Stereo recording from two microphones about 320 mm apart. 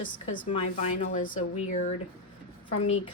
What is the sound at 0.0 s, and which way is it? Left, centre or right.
A woman's voice, centre.